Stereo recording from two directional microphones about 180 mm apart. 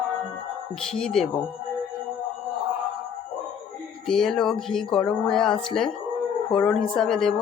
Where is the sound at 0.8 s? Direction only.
5° left (ahead or behind).